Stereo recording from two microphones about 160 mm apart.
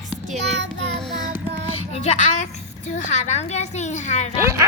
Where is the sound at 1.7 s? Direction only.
40° left (ahead or behind).